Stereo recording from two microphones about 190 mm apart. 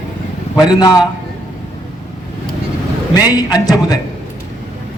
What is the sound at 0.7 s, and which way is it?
Speech, 20° left (ahead or behind).